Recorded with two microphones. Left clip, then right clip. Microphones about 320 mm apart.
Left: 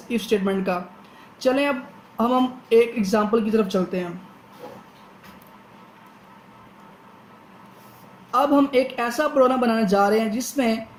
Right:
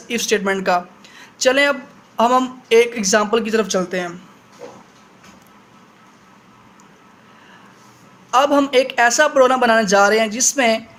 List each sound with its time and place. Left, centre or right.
0.1 s speech: right
8.3 s speech: right